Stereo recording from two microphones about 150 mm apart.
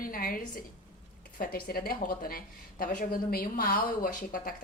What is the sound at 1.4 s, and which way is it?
A woman's voice, 85° left.